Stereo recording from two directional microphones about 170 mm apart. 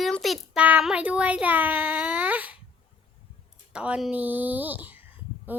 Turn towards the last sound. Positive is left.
turn(degrees=-10)  # may be behind; listen again after turning